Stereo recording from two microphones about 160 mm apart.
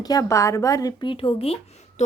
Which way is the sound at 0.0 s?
25° left (ahead or behind).